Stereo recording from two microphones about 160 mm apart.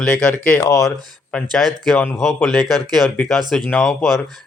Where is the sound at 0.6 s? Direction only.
20° left (ahead or behind).